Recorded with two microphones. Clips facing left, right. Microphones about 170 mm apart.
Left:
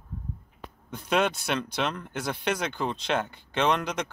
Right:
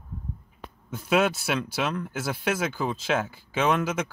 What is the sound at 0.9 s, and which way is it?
Speech, 5° right (ahead or behind).